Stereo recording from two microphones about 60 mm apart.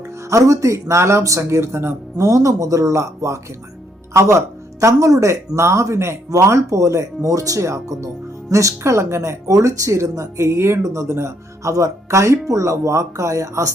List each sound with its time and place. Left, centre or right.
0.3 s speech: right